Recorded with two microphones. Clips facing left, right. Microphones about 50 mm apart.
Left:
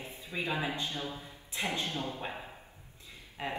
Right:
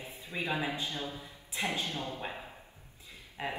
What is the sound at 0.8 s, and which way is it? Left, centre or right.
A man's voice, left.